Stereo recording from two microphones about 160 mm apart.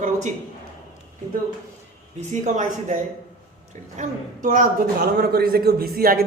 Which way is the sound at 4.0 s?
55° right (ahead or behind).